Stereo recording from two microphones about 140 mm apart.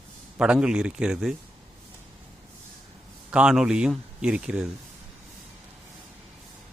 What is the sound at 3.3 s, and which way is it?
Speech, 5° right (ahead or behind).